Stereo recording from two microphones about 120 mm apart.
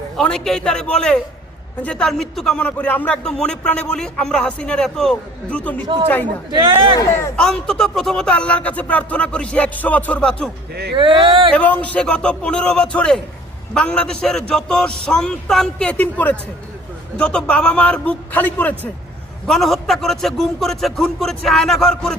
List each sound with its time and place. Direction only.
0.2 s speech: 5° left (ahead or behind)
5.8 s speech: 45° right (ahead or behind)
7.3 s speech: 5° left (ahead or behind)
10.9 s speech: 45° right (ahead or behind)
11.5 s speech: 10° left (ahead or behind)
19.5 s a man's voice: centre (ahead or behind)